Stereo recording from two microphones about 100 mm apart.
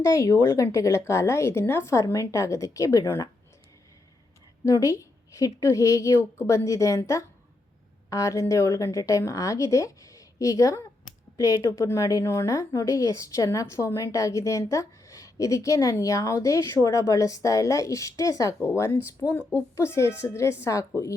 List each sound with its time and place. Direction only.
0.0 s a woman's voice: 35° left (ahead or behind)
4.6 s a woman's voice: 30° left (ahead or behind)
18.6 s a woman's voice: 20° left (ahead or behind)